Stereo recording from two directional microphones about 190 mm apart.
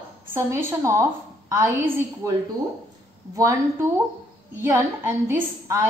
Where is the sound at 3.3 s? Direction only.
15° right (ahead or behind).